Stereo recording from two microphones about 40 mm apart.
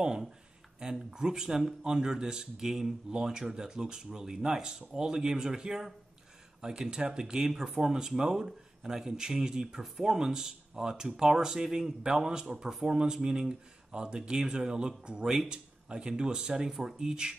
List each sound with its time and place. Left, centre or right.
0.8 s speech: centre